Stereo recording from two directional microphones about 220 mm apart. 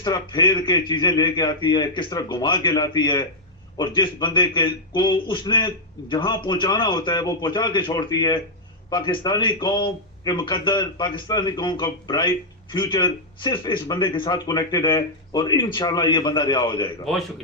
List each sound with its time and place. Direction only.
0.0 s a man's voice: 20° left (ahead or behind)